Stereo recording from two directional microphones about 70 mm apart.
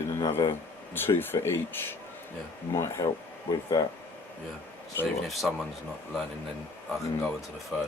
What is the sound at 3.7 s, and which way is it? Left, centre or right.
Speech, left.